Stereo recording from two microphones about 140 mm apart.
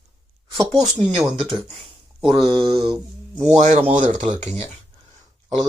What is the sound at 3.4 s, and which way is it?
Speech, 55° right (ahead or behind).